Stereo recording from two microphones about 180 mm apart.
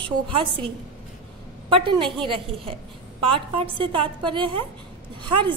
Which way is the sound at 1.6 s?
30° right (ahead or behind).